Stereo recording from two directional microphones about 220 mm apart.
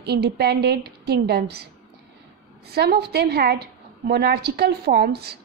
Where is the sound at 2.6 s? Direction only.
45° right (ahead or behind).